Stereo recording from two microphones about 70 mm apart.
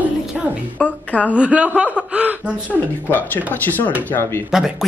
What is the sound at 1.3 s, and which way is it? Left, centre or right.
Speech, centre.